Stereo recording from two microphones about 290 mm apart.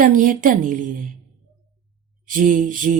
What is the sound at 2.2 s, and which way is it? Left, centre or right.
Speech, right.